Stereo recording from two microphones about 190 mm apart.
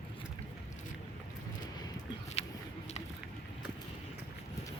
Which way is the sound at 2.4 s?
35° left (ahead or behind).